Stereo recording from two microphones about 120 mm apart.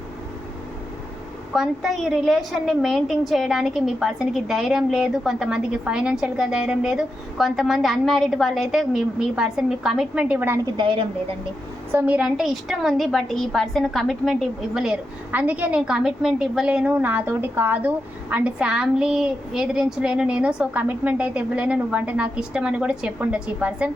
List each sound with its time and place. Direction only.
1.5 s a woman's voice: centre (ahead or behind)
10.8 s a woman's voice: 45° right (ahead or behind)
11.9 s a woman's voice: 15° right (ahead or behind)
15.3 s a woman's voice: 10° right (ahead or behind)